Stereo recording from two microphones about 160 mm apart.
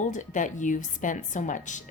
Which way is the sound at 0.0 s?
50° left (ahead or behind).